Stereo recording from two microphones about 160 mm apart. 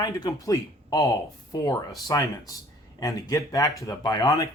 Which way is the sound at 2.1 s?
20° left (ahead or behind).